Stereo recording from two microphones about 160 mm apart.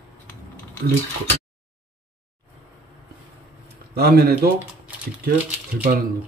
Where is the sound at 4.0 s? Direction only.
75° right (ahead or behind).